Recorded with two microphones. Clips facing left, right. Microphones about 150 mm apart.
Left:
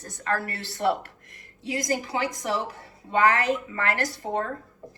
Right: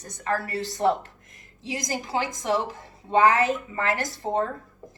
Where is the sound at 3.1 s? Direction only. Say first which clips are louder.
Right 2 dB; 20° right (ahead or behind).